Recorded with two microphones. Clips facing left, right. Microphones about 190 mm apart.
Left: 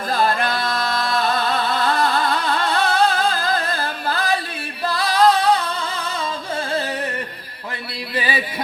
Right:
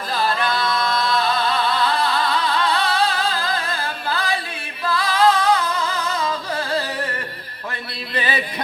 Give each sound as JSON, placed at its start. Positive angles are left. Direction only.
{"t": 0.1, "sound": "music", "side_deg": 50}
{"t": 6.6, "sound": "music", "side_deg": 25}
{"t": 8.1, "sound": "a sound", "side_deg": 10}